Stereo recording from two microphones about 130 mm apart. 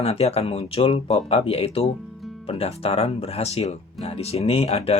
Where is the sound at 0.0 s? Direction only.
50° left (ahead or behind).